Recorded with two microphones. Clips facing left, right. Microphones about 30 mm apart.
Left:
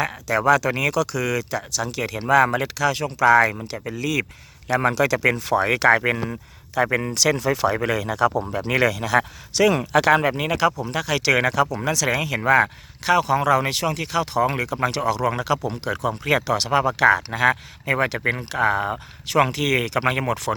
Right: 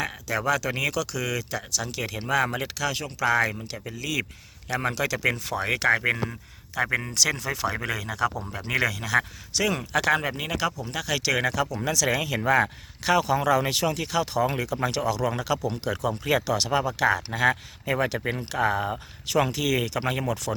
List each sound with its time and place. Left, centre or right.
0.0 s speech: centre
7.3 s speech: left
7.7 s speech: centre
9.5 s speech: left
16.0 s speech: centre